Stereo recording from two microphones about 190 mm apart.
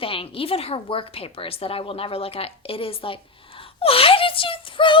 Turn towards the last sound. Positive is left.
turn(degrees=25)  # may be behind; listen again after turning